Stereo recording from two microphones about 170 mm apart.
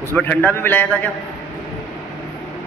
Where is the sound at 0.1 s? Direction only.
10° left (ahead or behind).